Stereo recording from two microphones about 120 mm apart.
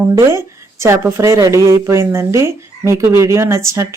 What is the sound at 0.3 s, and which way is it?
Speech, 20° right (ahead or behind).